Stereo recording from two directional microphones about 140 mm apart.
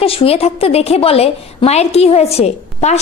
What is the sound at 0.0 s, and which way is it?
A woman's voice, 45° left (ahead or behind).